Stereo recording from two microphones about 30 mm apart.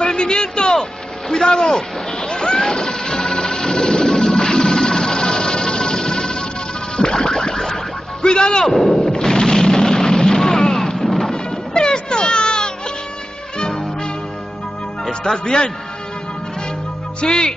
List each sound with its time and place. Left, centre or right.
0.0 s a sound: left
1.3 s speech: centre
2.7 s a sound: left
7.0 s music: left
7.3 s boing: centre
8.2 s a sound: left
8.6 s speech: centre
8.9 s music: left
11.3 s music: left
15.3 s speech: left
17.2 s speech: left